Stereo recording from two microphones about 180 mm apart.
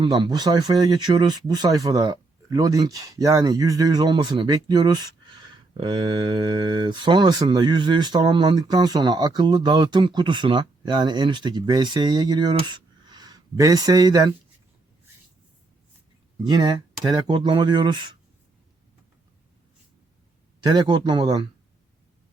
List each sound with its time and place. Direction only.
0.0 s speech: 25° right (ahead or behind)
16.4 s speech: 25° right (ahead or behind)
20.7 s speech: 25° right (ahead or behind)